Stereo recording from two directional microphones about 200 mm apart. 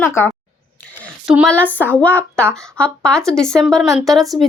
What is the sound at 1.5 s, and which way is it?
Speech, 10° left (ahead or behind).